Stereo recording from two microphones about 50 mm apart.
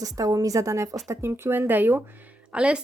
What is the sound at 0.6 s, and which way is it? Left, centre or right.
Speech, right.